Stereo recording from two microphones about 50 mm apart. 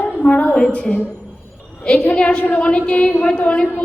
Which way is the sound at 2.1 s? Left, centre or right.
Left.